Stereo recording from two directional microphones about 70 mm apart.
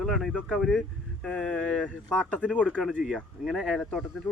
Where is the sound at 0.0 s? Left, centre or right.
Centre.